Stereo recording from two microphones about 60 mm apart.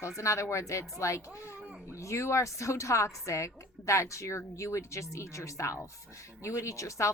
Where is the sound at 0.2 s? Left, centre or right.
Left.